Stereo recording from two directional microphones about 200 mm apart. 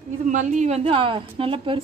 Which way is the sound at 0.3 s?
35° right (ahead or behind).